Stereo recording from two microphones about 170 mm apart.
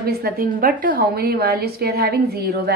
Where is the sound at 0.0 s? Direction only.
60° right (ahead or behind).